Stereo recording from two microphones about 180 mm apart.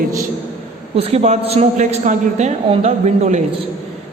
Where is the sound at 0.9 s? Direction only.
35° right (ahead or behind).